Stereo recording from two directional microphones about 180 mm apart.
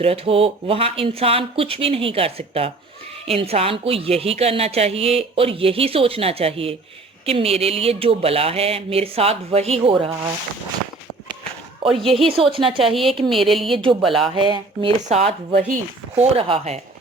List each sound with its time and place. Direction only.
0.0 s a woman's voice: 30° right (ahead or behind)
11.8 s a woman's voice: 30° right (ahead or behind)
12.9 s speech: centre (ahead or behind)
13.7 s speech: 30° right (ahead or behind)
15.5 s a woman's voice: 45° right (ahead or behind)